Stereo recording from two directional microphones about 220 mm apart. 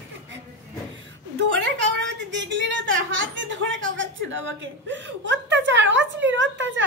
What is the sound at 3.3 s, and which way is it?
Chuckle, 55° right (ahead or behind).